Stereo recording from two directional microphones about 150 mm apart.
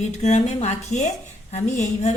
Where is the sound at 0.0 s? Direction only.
50° left (ahead or behind).